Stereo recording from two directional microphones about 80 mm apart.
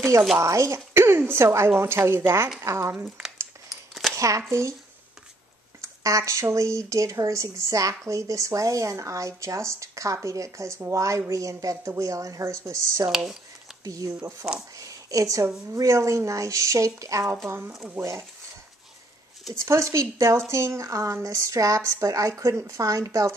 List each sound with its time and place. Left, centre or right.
0.4 s speech: right
3.6 s a sound: centre
4.1 s speech: right
5.8 s speech: right
13.1 s speech: centre
13.8 s speech: right
14.4 s speech: centre
14.8 s a sound: right
15.4 s speech: right
19.5 s speech: right